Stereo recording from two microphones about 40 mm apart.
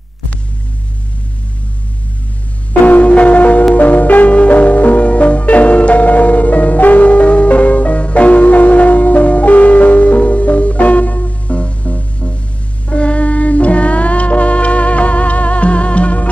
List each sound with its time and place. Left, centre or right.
2.8 s bell: left
3.1 s music: left